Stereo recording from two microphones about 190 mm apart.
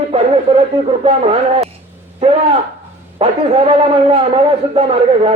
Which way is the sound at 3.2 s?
30° right (ahead or behind).